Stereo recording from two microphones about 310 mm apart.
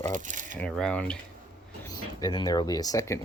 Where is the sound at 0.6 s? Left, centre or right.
Centre.